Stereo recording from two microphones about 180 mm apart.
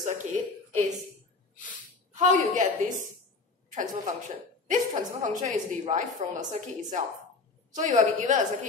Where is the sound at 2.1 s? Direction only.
45° right (ahead or behind).